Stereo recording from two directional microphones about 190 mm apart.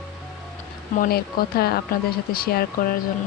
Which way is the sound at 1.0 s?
55° left (ahead or behind).